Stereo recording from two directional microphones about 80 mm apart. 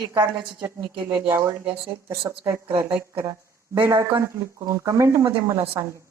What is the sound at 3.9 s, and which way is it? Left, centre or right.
A woman's voice, right.